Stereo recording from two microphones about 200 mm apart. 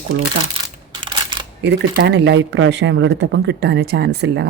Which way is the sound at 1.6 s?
55° right (ahead or behind).